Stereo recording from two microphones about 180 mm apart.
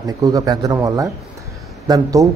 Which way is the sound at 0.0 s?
20° right (ahead or behind).